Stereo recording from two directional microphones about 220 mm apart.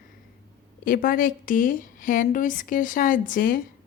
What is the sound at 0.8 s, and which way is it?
A woman's voice, 40° left (ahead or behind).